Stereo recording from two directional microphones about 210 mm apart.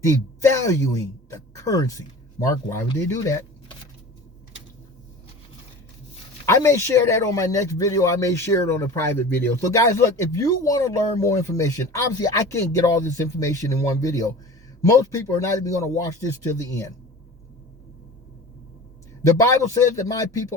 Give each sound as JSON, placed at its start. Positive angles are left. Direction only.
{"t": 0.5, "sound": "speech", "side_deg": 15}
{"t": 6.5, "sound": "a man's voice", "side_deg": 15}
{"t": 19.4, "sound": "a man's voice", "side_deg": 15}